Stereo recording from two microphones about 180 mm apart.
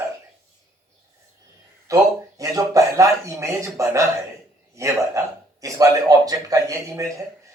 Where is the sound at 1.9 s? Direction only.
20° right (ahead or behind).